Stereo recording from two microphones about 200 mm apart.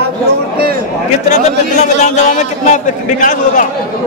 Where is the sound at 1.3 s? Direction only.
35° left (ahead or behind).